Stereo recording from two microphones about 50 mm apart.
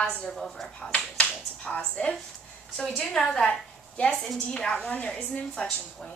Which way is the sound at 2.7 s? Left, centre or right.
Centre.